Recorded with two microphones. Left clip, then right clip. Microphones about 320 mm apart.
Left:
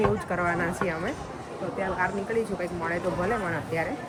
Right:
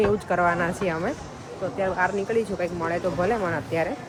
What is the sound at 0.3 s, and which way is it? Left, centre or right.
Speech, centre.